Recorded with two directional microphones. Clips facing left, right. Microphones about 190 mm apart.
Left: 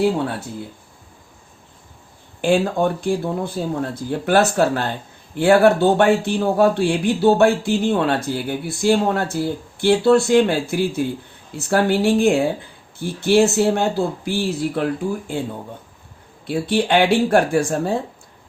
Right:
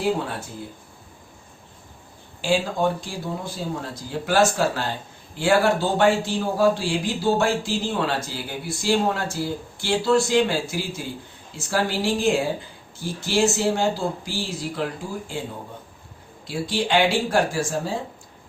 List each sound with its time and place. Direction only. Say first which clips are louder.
2.4 s a man's voice: left 5 dB; 55° left (ahead or behind)
16.5 s a man's voice: left 5 dB; 60° left (ahead or behind)